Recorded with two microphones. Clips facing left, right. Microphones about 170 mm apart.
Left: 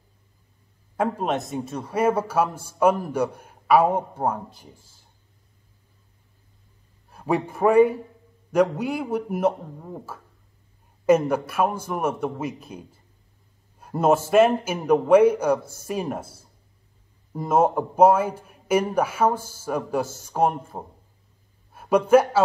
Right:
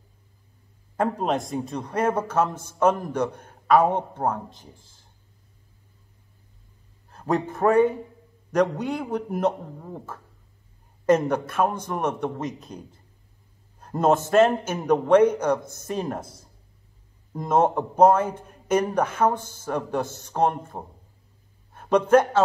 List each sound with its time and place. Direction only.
0.9 s a man's voice: centre (ahead or behind)
7.1 s a man's voice: 10° left (ahead or behind)